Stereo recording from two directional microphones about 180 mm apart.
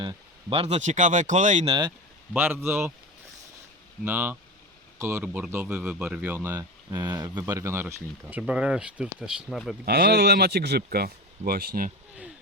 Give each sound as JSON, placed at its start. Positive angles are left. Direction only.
{"t": 0.0, "sound": "speech", "side_deg": -30}
{"t": 2.3, "sound": "speech", "side_deg": -10}
{"t": 4.0, "sound": "speech", "side_deg": -10}
{"t": 9.8, "sound": "speech", "side_deg": -60}